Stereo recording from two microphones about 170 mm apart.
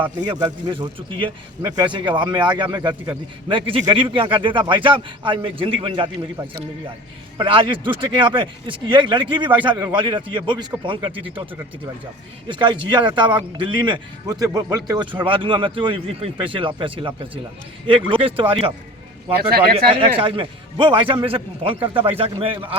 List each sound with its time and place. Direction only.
0.3 s a man's voice: 25° right (ahead or behind)
7.3 s a man's voice: 30° right (ahead or behind)
12.5 s a man's voice: 30° right (ahead or behind)
19.4 s speech: 65° right (ahead or behind)
19.9 s a man's voice: 30° right (ahead or behind)